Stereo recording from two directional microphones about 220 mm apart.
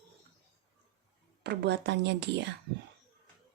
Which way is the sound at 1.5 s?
50° right (ahead or behind).